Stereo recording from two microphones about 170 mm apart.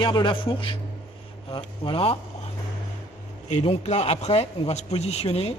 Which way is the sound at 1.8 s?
30° left (ahead or behind).